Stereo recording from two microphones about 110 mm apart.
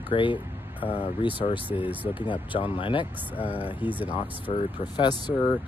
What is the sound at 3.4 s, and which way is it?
Speech, 15° right (ahead or behind).